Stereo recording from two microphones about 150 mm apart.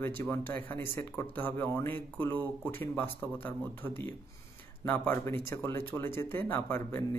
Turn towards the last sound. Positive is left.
turn(degrees=15)  # may be behind; listen again after turning